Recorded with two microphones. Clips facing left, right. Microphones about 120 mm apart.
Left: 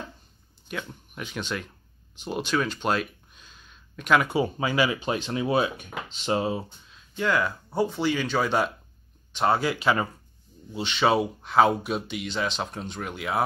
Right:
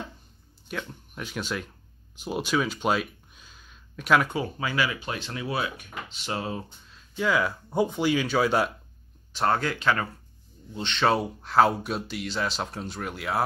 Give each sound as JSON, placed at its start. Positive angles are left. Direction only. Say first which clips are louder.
{"t": 0.7, "sound": "speech", "louder": "even", "side_deg": 0}
{"t": 4.6, "sound": "speech", "louder": "left 4 dB", "side_deg": 20}
{"t": 6.5, "sound": "speech", "louder": "left 3 dB", "side_deg": 5}
{"t": 9.3, "sound": "speech", "louder": "left 2 dB", "side_deg": 5}